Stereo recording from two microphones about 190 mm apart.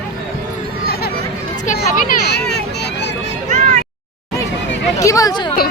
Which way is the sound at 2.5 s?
60° left (ahead or behind).